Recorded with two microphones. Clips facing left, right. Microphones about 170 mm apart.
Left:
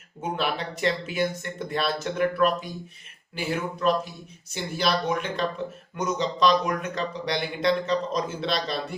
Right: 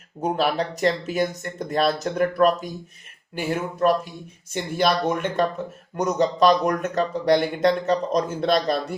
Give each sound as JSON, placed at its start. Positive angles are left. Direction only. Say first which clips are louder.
{"t": 0.2, "sound": "speech", "louder": "right 6 dB", "side_deg": -40}